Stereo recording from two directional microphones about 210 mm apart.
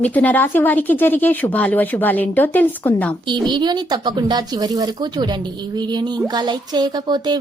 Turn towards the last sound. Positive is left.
turn(degrees=-20)  # may be behind; listen again after turning